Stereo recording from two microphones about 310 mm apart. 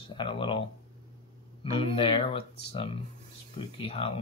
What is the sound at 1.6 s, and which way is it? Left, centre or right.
Speech, centre.